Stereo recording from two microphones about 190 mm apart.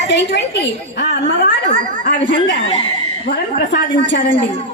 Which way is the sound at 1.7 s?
40° right (ahead or behind).